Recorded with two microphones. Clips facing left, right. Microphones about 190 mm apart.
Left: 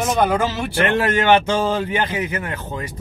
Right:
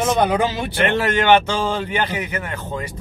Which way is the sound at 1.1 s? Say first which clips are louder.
Right 1 dB; 10° left (ahead or behind).